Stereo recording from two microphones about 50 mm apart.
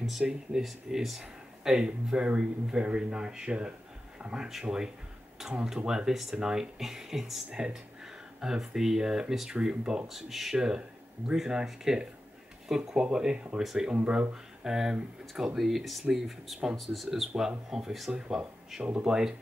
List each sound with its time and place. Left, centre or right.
0.2 s speech: centre
0.6 s speech: centre
1.2 s a sound: centre
2.0 s speech: centre
14.6 s speech: centre